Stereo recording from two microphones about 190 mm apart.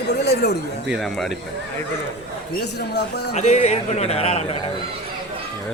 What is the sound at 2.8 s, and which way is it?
Speech, 60° left (ahead or behind).